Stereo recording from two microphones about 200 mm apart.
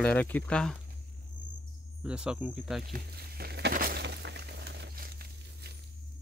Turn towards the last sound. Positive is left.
turn(degrees=-55)  # may be behind; listen again after turning